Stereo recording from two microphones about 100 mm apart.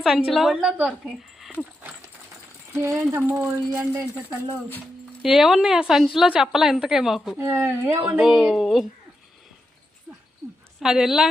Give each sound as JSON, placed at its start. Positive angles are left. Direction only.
{"t": 0.3, "sound": "a woman's voice", "side_deg": 0}
{"t": 2.7, "sound": "speech", "side_deg": -25}
{"t": 5.2, "sound": "a woman's voice", "side_deg": -5}
{"t": 7.3, "sound": "speech", "side_deg": -25}
{"t": 8.2, "sound": "a woman's voice", "side_deg": -5}
{"t": 10.1, "sound": "a sound", "side_deg": -15}
{"t": 10.8, "sound": "a woman's voice", "side_deg": -5}